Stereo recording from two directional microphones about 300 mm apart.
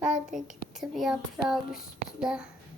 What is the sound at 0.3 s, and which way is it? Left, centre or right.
Speech, right.